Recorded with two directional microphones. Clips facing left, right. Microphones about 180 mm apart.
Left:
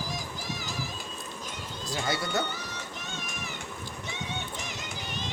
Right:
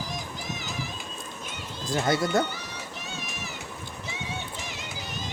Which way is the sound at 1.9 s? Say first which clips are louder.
Right 7 dB; 50° right (ahead or behind).